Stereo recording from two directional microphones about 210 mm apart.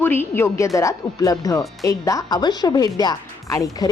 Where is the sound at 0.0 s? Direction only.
10° left (ahead or behind).